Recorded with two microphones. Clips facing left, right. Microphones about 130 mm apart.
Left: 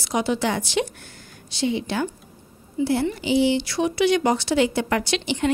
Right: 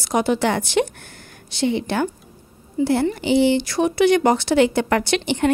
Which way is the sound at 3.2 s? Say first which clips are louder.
Right 3 dB; 55° right (ahead or behind).